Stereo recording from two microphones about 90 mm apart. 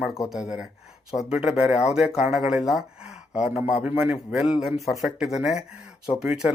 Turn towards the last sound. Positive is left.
turn(degrees=-10)  # may be behind; listen again after turning